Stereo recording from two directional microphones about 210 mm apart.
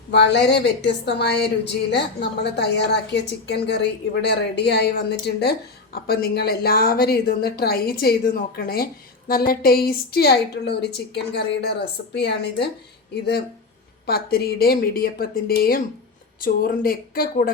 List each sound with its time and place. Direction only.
0.1 s a woman's voice: 55° left (ahead or behind)
14.1 s a woman's voice: 45° left (ahead or behind)